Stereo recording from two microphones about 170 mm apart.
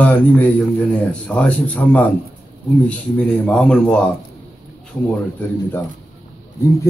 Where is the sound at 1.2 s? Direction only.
5° left (ahead or behind).